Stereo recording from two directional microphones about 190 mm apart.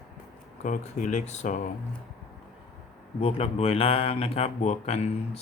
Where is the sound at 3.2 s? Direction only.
30° left (ahead or behind).